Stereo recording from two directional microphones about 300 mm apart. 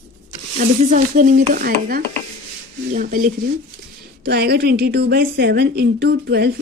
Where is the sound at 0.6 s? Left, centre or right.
Right.